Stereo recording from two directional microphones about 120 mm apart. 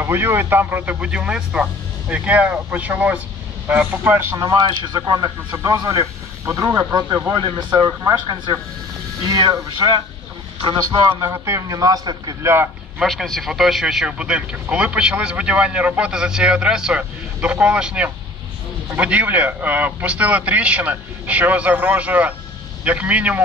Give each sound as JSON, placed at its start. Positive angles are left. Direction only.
{"t": 0.0, "sound": "a man's voice", "side_deg": -20}
{"t": 4.4, "sound": "speech", "side_deg": -35}
{"t": 5.5, "sound": "a man's voice", "side_deg": -25}
{"t": 11.1, "sound": "speech", "side_deg": -20}
{"t": 13.0, "sound": "a man's voice", "side_deg": 0}